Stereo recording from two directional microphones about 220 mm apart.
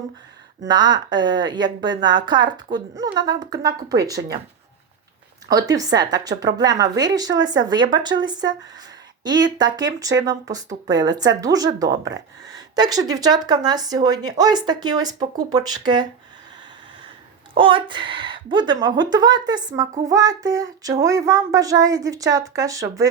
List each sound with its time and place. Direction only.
0.7 s a woman's voice: 20° right (ahead or behind)
5.5 s a woman's voice: 15° right (ahead or behind)
17.6 s a woman's voice: 25° right (ahead or behind)